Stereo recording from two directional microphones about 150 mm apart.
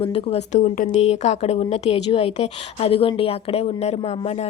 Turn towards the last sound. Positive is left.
turn(degrees=45)  # may be behind; listen again after turning